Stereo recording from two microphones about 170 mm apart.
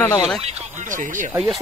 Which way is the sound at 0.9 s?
50° right (ahead or behind).